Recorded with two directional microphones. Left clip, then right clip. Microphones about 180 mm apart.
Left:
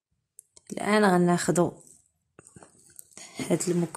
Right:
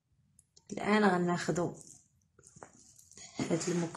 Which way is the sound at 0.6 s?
45° left (ahead or behind).